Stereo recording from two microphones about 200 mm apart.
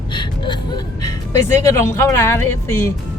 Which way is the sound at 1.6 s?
15° left (ahead or behind).